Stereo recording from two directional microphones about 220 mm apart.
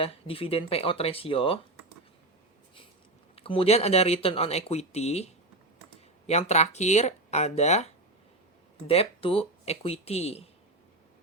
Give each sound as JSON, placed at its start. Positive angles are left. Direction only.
{"t": 0.0, "sound": "speech", "side_deg": 25}
{"t": 3.3, "sound": "speech", "side_deg": 25}
{"t": 8.9, "sound": "speech", "side_deg": 25}